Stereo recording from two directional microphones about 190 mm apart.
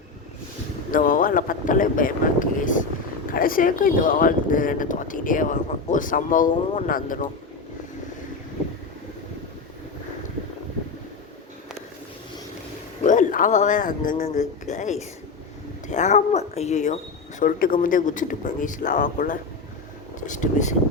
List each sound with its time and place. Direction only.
0.9 s speech: 45° left (ahead or behind)
13.0 s speech: 40° left (ahead or behind)
17.4 s speech: 45° left (ahead or behind)